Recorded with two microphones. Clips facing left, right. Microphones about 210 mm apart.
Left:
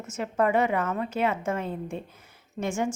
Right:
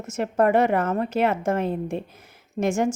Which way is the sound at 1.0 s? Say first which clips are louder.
Right 5 dB; 75° right (ahead or behind).